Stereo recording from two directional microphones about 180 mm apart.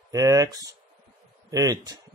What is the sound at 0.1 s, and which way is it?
Speech, 20° right (ahead or behind).